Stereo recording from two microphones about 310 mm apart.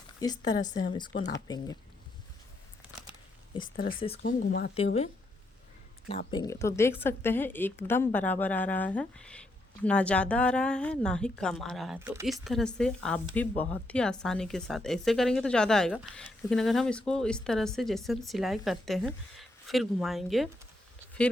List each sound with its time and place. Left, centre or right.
0.2 s speech: centre
3.8 s speech: left
6.3 s speech: centre